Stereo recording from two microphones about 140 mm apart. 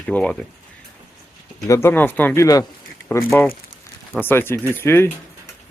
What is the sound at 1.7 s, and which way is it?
Speech, 20° left (ahead or behind).